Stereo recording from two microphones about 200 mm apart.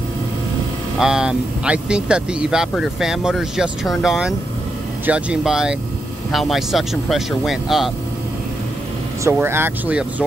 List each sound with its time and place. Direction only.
0.9 s speech: 5° right (ahead or behind)
9.2 s speech: 10° right (ahead or behind)